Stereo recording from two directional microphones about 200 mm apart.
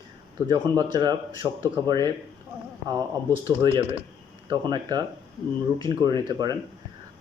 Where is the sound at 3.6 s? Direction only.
20° right (ahead or behind).